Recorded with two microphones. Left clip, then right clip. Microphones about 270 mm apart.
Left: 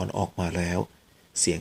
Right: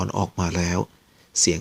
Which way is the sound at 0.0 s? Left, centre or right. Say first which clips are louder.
Right 3 dB; right.